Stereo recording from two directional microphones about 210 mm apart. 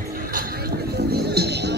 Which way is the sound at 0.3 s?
45° right (ahead or behind).